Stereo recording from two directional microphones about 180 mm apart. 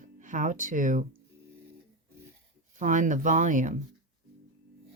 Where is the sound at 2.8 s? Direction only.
45° right (ahead or behind).